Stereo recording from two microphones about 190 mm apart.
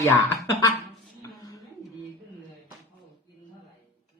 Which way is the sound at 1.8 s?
20° left (ahead or behind).